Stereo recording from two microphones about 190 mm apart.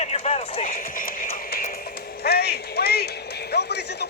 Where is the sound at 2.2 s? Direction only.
55° left (ahead or behind).